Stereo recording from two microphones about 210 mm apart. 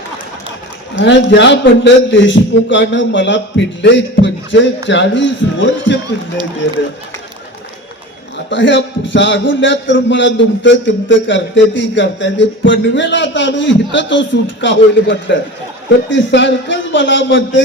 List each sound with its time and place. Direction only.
0.9 s speech: 60° left (ahead or behind)
8.4 s speech: 60° left (ahead or behind)